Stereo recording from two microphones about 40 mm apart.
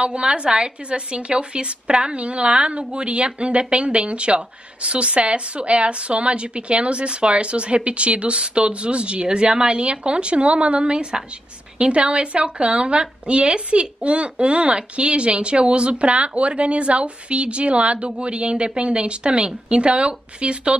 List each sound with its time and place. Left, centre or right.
0.0 s a woman's voice: right